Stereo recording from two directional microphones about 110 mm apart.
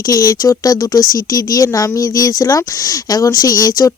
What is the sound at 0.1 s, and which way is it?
Speech, 30° left (ahead or behind).